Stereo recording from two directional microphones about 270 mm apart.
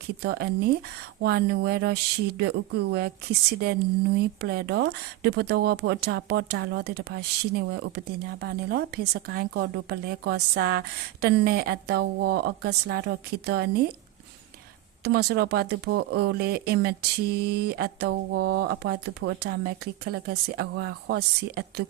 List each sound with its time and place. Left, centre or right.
0.2 s speech: right
3.6 s speech: right
15.0 s speech: right